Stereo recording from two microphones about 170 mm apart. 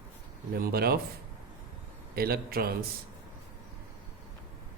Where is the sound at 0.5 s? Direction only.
65° right (ahead or behind).